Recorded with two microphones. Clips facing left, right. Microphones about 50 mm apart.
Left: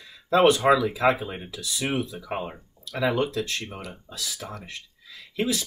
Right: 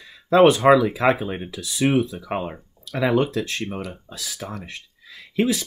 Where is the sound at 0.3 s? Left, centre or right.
Right.